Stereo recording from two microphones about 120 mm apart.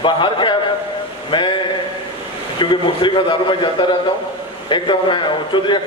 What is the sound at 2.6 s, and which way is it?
A man's voice, 40° left (ahead or behind).